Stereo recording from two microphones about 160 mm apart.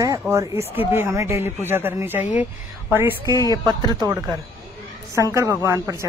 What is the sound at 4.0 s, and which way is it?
Speech, 25° right (ahead or behind).